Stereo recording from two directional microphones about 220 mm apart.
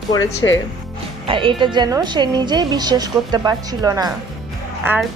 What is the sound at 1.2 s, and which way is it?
A woman's voice, 25° right (ahead or behind).